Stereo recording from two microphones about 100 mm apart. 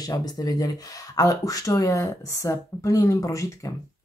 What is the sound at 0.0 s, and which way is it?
Speech, 40° left (ahead or behind).